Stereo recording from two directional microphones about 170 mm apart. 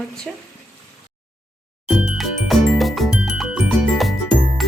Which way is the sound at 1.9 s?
5° right (ahead or behind).